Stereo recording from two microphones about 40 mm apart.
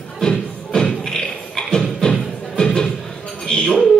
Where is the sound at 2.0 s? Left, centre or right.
Centre.